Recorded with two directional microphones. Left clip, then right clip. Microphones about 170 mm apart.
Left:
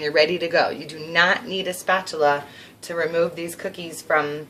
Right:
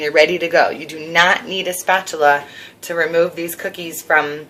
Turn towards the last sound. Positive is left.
turn(degrees=20)  # may be behind; listen again after turning